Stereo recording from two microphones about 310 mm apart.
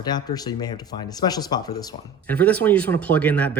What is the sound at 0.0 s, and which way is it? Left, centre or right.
Speech, centre.